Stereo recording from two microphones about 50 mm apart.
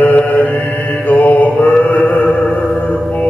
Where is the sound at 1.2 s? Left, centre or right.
Left.